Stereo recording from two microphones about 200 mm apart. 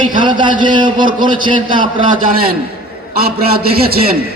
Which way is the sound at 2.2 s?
50° right (ahead or behind).